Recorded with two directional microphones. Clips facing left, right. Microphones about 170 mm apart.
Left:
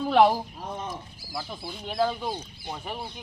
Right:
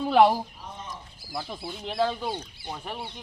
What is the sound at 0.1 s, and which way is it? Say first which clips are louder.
Speech: even; centre (ahead or behind).